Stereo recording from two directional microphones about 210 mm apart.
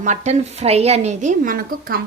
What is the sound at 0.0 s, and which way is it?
A woman's voice, 35° right (ahead or behind).